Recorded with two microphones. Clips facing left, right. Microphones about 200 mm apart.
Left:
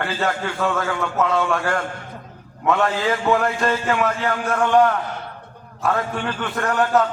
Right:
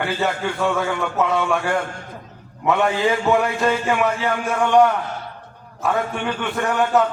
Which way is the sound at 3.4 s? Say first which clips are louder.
Right 1 dB; centre (ahead or behind).